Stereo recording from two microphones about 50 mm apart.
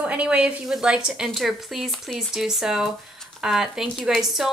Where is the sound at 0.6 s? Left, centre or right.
Centre.